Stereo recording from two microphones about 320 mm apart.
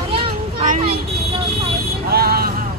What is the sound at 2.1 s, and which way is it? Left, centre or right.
Speech, right.